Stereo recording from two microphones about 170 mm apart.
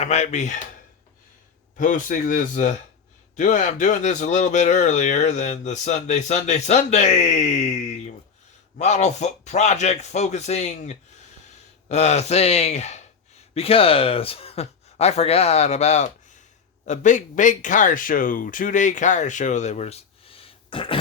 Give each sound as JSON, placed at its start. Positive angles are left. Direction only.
{"t": 0.0, "sound": "speech", "side_deg": 40}
{"t": 1.7, "sound": "speech", "side_deg": 50}